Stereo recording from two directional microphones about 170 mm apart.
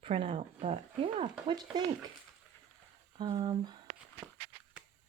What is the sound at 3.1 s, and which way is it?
Speech, 30° right (ahead or behind).